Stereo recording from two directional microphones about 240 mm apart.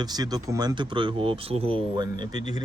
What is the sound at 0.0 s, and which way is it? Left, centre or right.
Speech, centre.